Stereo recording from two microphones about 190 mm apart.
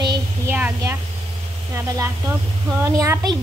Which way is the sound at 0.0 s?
20° right (ahead or behind).